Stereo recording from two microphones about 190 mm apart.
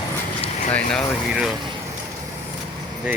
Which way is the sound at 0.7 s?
5° left (ahead or behind).